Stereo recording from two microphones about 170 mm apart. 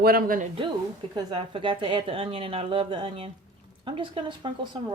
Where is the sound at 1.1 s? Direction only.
30° right (ahead or behind).